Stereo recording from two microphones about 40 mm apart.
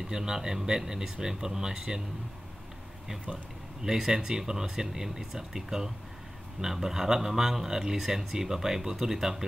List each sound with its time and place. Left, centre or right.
0.0 s speech: centre
3.8 s speech: centre